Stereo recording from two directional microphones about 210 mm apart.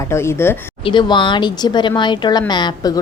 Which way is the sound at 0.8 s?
20° left (ahead or behind).